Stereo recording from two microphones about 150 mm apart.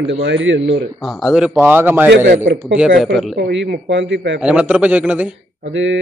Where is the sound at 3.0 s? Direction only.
Centre (ahead or behind).